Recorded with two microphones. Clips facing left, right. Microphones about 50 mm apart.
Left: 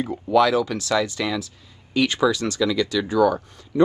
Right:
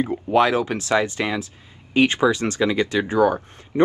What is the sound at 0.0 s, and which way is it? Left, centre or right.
Speech, right.